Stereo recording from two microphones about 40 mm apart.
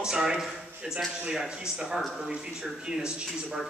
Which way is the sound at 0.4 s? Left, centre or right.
Centre.